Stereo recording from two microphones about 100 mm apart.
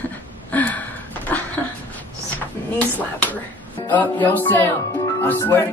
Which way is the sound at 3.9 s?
20° left (ahead or behind).